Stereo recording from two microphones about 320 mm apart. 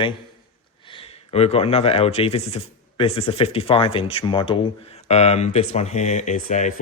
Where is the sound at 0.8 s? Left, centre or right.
Centre.